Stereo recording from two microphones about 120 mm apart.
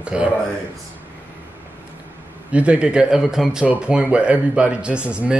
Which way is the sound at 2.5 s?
10° right (ahead or behind).